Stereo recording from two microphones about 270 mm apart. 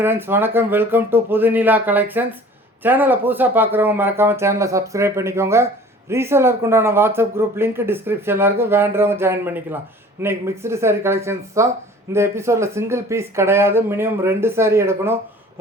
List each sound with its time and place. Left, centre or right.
0.0 s speech: centre